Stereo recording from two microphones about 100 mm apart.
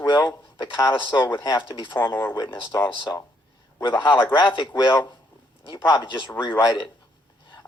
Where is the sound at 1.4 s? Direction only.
50° left (ahead or behind).